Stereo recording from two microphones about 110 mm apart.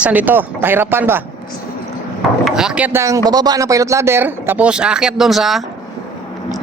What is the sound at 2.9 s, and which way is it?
Speech, 25° right (ahead or behind).